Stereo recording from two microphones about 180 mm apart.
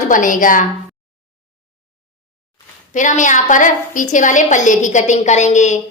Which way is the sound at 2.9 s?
45° left (ahead or behind).